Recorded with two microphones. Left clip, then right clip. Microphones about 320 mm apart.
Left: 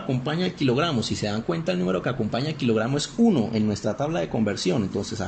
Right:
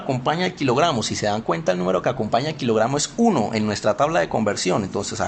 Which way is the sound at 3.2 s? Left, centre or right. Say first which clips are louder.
Right 3 dB; right.